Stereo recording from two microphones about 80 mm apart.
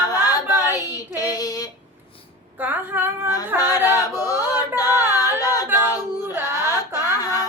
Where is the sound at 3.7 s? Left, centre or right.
Left.